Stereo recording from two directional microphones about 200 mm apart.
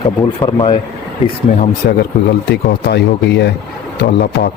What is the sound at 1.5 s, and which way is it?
Speech, 45° left (ahead or behind).